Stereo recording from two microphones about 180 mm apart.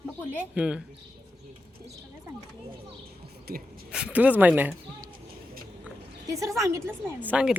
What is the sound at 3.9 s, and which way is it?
Speech, 5° right (ahead or behind).